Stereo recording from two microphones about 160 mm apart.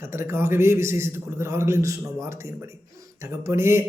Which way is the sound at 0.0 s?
15° right (ahead or behind).